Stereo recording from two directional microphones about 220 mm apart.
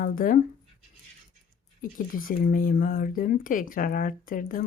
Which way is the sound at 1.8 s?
40° left (ahead or behind).